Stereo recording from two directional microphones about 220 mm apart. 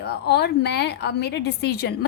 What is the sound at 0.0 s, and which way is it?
A woman's voice, 45° left (ahead or behind).